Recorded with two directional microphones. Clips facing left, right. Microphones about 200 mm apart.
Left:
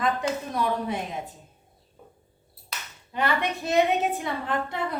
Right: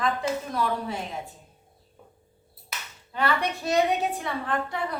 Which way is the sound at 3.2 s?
20° left (ahead or behind).